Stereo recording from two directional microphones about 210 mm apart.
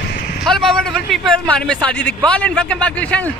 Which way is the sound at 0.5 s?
Centre (ahead or behind).